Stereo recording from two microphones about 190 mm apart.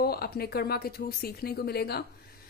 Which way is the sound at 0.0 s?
55° left (ahead or behind).